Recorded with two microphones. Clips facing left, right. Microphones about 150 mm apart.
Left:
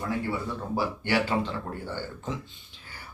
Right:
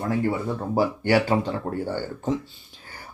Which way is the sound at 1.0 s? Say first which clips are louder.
Right 4 dB; 40° right (ahead or behind).